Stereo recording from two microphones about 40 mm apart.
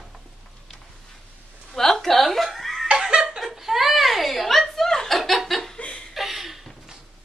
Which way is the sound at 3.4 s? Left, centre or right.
Centre.